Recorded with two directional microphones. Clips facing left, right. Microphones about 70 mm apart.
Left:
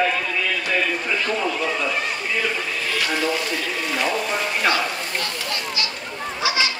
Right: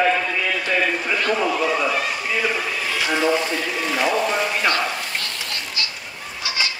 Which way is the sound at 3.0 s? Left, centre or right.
Centre.